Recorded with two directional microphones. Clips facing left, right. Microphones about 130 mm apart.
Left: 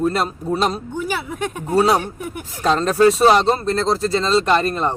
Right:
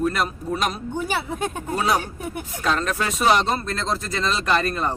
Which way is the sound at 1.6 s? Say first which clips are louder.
Left 7 dB; 30° left (ahead or behind).